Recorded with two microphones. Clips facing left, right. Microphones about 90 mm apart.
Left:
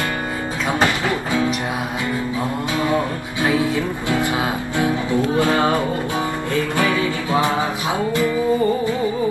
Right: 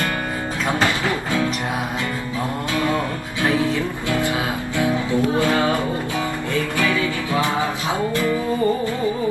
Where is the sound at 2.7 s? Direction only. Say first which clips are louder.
Left 1 dB; 20° left (ahead or behind).